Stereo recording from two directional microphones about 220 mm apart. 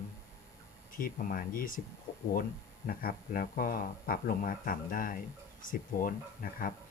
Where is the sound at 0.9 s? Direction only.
40° left (ahead or behind).